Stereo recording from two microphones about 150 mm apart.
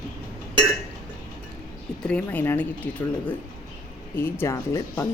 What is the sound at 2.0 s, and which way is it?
Speech, 10° left (ahead or behind).